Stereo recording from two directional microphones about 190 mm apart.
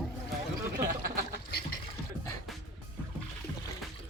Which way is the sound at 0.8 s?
50° right (ahead or behind).